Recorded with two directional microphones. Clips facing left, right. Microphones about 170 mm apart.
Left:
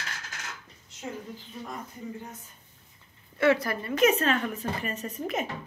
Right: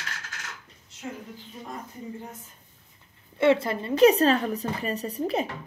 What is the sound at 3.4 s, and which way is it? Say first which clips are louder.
A woman's voice: right 2 dB; 25° right (ahead or behind).